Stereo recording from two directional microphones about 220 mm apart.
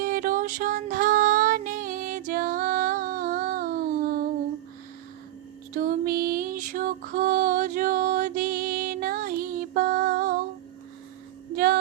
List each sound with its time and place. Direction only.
0.0 s female singing: 40° right (ahead or behind)
5.7 s music: 40° right (ahead or behind)
11.5 s female singing: 45° right (ahead or behind)